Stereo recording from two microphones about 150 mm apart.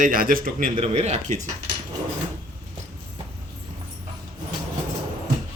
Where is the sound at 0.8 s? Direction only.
45° right (ahead or behind).